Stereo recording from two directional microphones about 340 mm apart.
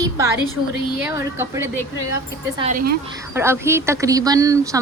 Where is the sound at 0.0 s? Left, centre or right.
Centre.